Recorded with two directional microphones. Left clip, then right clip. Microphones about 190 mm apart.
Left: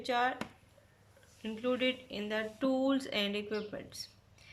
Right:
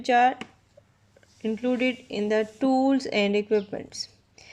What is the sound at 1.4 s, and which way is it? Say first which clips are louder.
Speech: right 7 dB; 30° right (ahead or behind).